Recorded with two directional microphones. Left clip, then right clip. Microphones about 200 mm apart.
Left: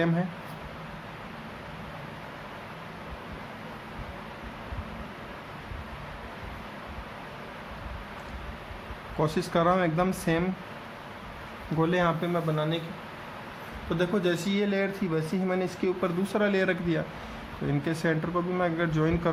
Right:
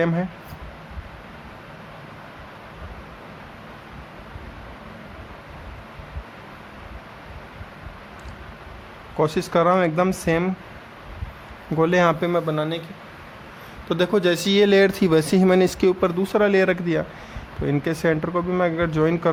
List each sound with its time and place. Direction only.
9.1 s speech: 35° right (ahead or behind)
11.8 s a man's voice: 45° right (ahead or behind); by 12.8 s 60° right (ahead or behind)
13.9 s speech: 50° right (ahead or behind)